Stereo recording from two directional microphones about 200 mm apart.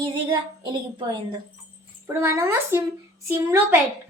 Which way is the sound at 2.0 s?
15° right (ahead or behind).